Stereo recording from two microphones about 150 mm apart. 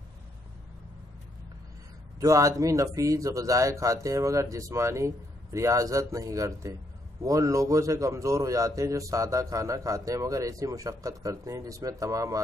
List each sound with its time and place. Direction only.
2.1 s a man's voice: 20° right (ahead or behind)